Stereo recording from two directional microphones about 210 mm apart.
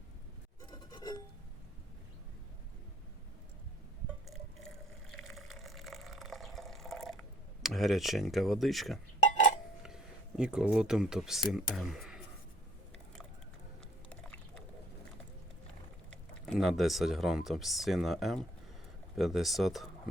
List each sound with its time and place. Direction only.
0.7 s a sound: 20° left (ahead or behind)
4.3 s water: centre (ahead or behind)
7.6 s speech: centre (ahead or behind)
14.1 s typing: 5° left (ahead or behind)
16.0 s speech: 5° left (ahead or behind)